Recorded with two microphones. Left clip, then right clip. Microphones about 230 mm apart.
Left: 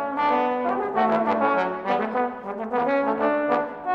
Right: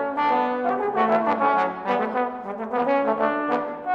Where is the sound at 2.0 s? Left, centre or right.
Centre.